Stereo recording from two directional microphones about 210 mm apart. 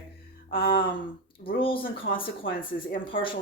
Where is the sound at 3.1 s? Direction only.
25° left (ahead or behind).